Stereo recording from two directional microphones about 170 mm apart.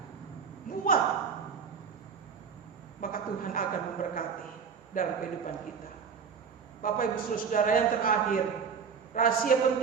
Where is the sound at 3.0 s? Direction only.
55° left (ahead or behind).